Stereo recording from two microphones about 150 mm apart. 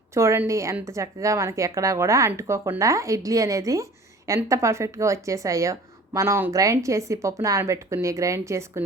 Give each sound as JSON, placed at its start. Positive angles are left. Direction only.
{"t": 0.1, "sound": "speech", "side_deg": -20}